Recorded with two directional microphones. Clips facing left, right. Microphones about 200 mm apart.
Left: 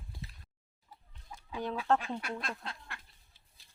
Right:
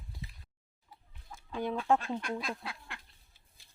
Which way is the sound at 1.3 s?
10° left (ahead or behind).